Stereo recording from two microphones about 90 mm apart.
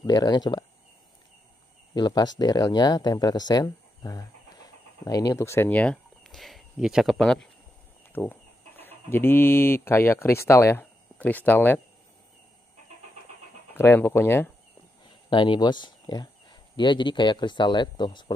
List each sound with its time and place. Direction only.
0.0 s speech: 50° left (ahead or behind)
2.0 s speech: 55° left (ahead or behind); by 5.7 s 30° left (ahead or behind)
5.7 s speech: 15° left (ahead or behind)
6.2 s speech: centre (ahead or behind)
8.1 s speech: 20° left (ahead or behind)
11.1 s speech: 20° left (ahead or behind)
13.7 s speech: 25° left (ahead or behind)
15.2 s speech: 60° left (ahead or behind)